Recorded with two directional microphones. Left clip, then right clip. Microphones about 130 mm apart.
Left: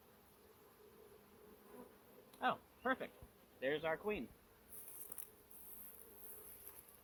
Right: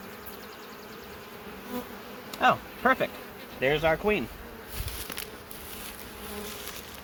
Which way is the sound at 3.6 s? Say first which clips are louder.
Right 15 dB; 90° right.